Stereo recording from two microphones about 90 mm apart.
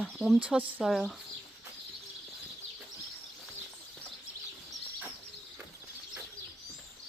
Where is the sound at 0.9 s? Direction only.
Centre (ahead or behind).